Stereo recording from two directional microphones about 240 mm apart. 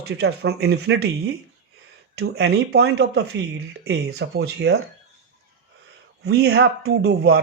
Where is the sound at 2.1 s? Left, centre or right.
Right.